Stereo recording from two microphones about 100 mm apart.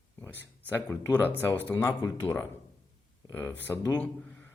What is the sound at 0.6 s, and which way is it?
Speech, 20° left (ahead or behind).